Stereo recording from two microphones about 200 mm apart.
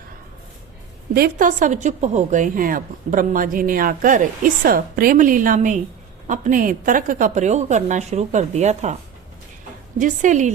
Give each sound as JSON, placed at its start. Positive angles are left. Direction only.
{"t": 1.1, "sound": "a woman's voice", "side_deg": -45}
{"t": 10.0, "sound": "speech", "side_deg": -40}